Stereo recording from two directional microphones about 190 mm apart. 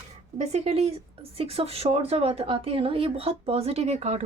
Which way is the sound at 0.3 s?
35° right (ahead or behind).